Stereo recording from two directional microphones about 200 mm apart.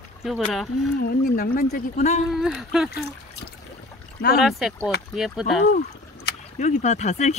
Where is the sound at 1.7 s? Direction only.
35° left (ahead or behind).